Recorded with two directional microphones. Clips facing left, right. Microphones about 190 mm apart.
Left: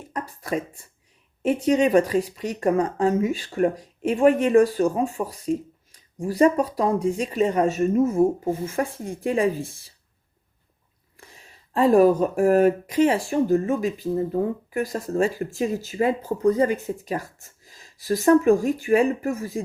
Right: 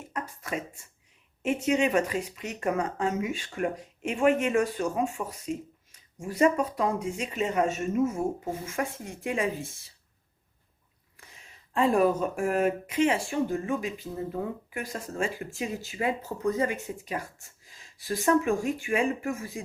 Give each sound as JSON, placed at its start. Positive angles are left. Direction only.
{"t": 0.1, "sound": "beatboxing", "side_deg": 35}
{"t": 1.4, "sound": "speech", "side_deg": 35}
{"t": 11.2, "sound": "speech", "side_deg": 35}